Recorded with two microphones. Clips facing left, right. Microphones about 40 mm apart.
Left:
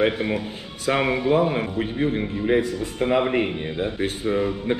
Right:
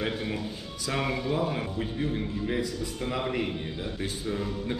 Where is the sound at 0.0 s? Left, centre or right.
Left.